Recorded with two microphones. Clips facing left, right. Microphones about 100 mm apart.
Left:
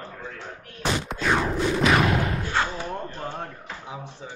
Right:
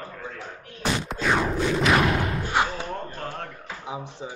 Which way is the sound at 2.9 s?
15° left (ahead or behind).